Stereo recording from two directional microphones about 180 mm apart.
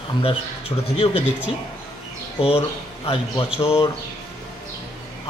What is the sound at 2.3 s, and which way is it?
Speech, 35° left (ahead or behind).